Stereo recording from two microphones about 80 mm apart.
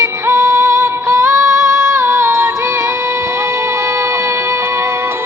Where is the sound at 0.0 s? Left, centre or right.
Right.